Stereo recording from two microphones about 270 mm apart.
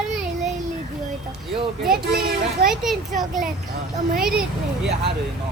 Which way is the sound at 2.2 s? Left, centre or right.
Right.